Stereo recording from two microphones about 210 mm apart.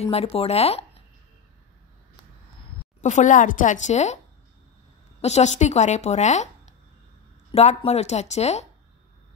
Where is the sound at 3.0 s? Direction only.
35° left (ahead or behind).